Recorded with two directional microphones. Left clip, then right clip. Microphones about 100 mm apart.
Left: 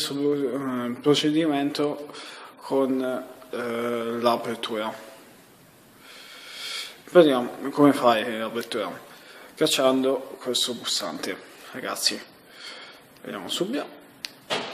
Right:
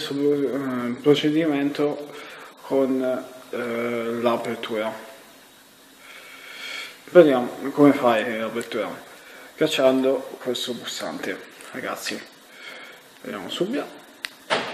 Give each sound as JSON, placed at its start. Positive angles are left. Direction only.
{"t": 0.0, "sound": "speech", "side_deg": 25}
{"t": 6.6, "sound": "speech", "side_deg": 25}
{"t": 13.3, "sound": "speech", "side_deg": 30}